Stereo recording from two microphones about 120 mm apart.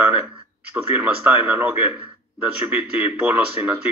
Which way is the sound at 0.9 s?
15° right (ahead or behind).